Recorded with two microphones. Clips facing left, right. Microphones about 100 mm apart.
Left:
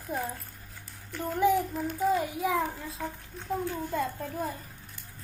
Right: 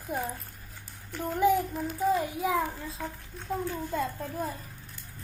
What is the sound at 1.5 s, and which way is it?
Child singing, 10° left (ahead or behind).